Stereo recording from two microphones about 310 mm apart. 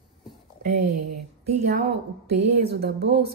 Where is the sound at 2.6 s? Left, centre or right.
Right.